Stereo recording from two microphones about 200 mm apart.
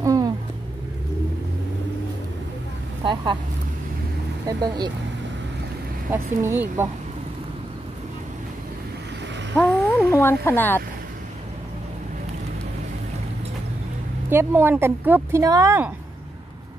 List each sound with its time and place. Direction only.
0.0 s a sound: 15° right (ahead or behind)
3.0 s speech: 20° right (ahead or behind)
4.5 s speech: 20° right (ahead or behind)
6.0 s a woman's voice: 10° right (ahead or behind)
9.6 s speech: 10° left (ahead or behind)
14.3 s a woman's voice: 10° right (ahead or behind)